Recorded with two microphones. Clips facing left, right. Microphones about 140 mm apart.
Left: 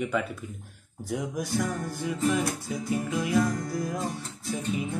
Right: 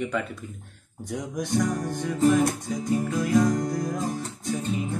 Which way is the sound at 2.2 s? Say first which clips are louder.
Right 7 dB; 40° right (ahead or behind).